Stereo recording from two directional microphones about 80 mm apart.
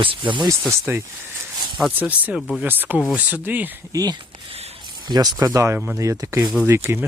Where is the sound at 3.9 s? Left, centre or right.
Right.